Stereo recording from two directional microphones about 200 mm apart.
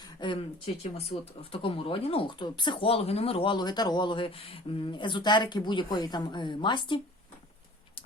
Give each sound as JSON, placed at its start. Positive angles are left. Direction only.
{"t": 0.2, "sound": "speech", "side_deg": 30}